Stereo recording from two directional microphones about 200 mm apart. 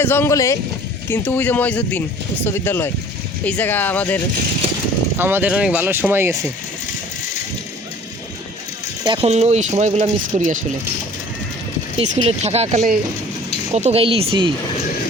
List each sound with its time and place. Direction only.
0.0 s speech: 10° left (ahead or behind)
5.1 s speech: 10° right (ahead or behind)
9.0 s speech: 30° right (ahead or behind)
11.9 s speech: 35° right (ahead or behind)